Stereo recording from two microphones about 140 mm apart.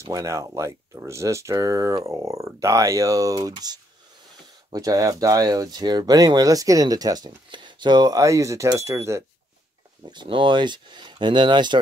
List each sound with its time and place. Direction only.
0.0 s speech: 25° right (ahead or behind)
10.0 s speech: 35° right (ahead or behind)